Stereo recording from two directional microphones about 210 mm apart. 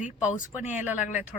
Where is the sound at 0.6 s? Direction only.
5° right (ahead or behind).